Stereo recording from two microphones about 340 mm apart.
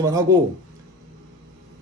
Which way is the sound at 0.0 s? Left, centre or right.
Centre.